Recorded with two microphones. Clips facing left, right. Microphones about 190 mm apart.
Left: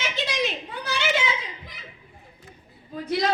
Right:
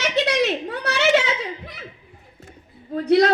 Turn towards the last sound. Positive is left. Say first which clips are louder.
# right 9 dB
turn(degrees=-70)  # may be behind; listen again after turning